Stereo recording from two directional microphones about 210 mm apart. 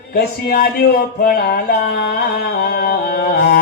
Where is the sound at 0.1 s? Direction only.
45° left (ahead or behind).